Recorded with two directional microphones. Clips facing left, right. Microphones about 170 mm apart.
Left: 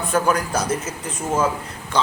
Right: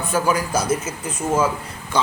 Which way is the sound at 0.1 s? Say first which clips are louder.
Even; 5° right (ahead or behind).